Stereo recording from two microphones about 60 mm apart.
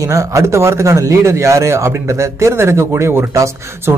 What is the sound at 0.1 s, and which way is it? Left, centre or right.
Speech, right.